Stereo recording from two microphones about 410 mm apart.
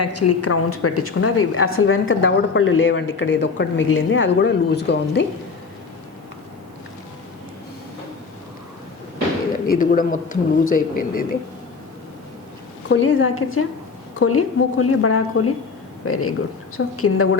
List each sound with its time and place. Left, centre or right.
0.0 s a woman's voice: left
9.6 s a woman's voice: centre
12.9 s a woman's voice: left